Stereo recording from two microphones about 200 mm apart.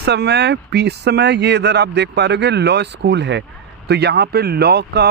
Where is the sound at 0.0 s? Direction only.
55° right (ahead or behind).